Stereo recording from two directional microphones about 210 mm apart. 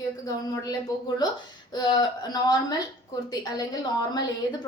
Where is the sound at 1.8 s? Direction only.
20° left (ahead or behind).